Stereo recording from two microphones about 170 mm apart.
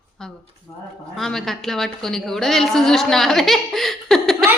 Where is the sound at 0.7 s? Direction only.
15° left (ahead or behind).